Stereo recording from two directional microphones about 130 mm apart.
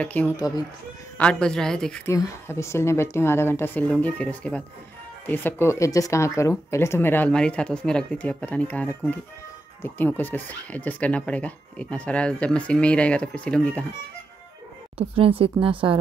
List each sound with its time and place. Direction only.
0.0 s speech: 10° left (ahead or behind)
2.0 s speech: 20° left (ahead or behind)
15.0 s speech: 45° right (ahead or behind)